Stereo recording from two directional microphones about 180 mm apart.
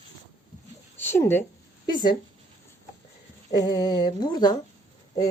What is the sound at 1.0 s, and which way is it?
Speech, 10° left (ahead or behind).